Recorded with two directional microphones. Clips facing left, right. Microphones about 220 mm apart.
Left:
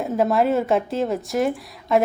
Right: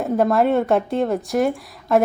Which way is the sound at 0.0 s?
Centre (ahead or behind).